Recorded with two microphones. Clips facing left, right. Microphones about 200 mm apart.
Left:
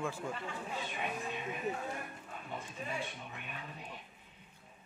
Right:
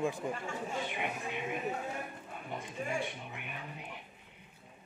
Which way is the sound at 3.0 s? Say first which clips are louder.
Right 3 dB; 20° right (ahead or behind).